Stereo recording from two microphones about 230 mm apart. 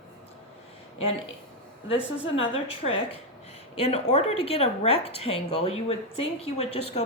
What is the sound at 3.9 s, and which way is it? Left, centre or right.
A woman's voice, left.